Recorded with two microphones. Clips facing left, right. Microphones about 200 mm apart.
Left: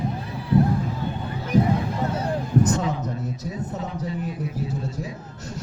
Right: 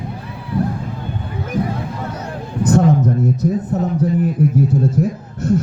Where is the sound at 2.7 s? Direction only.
60° right (ahead or behind).